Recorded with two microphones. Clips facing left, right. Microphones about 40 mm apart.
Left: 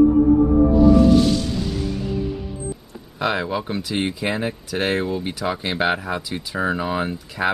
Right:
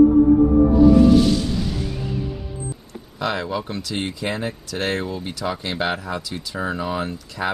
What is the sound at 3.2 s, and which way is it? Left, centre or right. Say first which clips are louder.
Speech: left 2 dB; centre.